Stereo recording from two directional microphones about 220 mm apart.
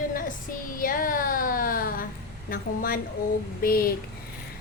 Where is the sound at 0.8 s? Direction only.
40° left (ahead or behind).